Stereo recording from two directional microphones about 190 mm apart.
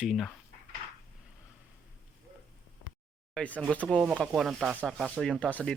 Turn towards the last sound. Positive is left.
turn(degrees=5)  # may be behind; listen again after turning